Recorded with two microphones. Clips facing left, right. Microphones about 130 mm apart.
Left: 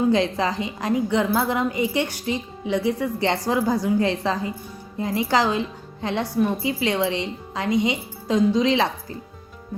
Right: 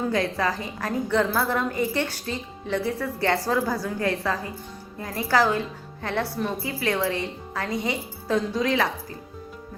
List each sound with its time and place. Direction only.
0.1 s a woman's voice: 20° left (ahead or behind)